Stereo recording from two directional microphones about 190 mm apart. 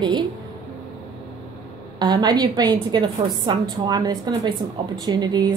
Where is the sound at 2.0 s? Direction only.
20° right (ahead or behind).